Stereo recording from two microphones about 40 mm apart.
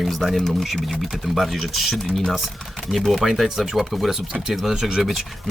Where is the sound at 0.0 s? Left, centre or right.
Centre.